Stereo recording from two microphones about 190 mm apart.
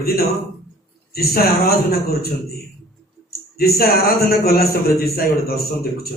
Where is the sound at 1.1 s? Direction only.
55° left (ahead or behind).